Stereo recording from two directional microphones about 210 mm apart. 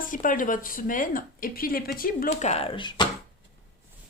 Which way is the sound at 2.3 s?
30° left (ahead or behind).